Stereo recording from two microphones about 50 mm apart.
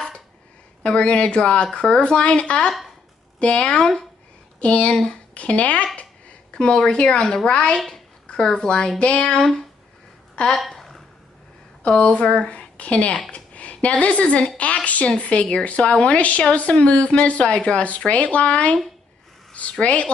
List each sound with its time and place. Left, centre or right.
0.8 s a woman's voice: left
10.5 s a sound: centre
12.0 s a woman's voice: centre